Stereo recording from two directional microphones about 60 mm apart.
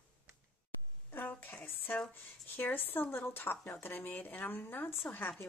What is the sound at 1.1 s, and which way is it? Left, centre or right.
Speech, left.